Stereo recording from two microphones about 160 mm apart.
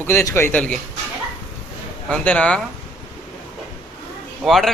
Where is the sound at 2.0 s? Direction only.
10° left (ahead or behind).